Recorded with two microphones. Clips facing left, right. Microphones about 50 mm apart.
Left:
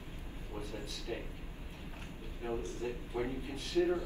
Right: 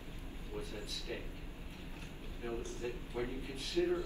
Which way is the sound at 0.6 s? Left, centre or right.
Left.